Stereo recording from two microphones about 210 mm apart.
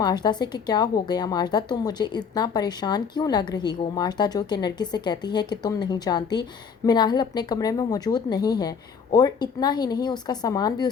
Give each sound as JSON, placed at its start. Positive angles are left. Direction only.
{"t": 0.0, "sound": "a woman's voice", "side_deg": 20}